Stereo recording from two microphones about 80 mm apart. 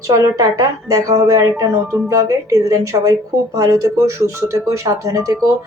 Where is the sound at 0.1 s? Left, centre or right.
Right.